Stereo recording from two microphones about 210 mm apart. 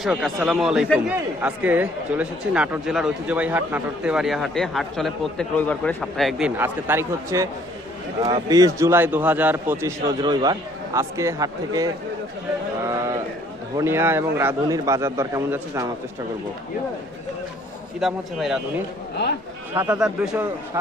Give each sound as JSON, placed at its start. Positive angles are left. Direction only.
{"t": 0.0, "sound": "speech", "side_deg": 0}
{"t": 6.6, "sound": "a man's voice", "side_deg": -10}
{"t": 18.0, "sound": "speech", "side_deg": 0}
{"t": 19.7, "sound": "a man's voice", "side_deg": -10}